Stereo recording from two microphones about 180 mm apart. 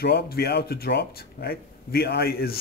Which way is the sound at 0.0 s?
60° left (ahead or behind).